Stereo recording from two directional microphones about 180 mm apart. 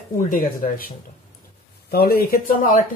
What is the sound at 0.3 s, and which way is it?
Speech, 50° left (ahead or behind).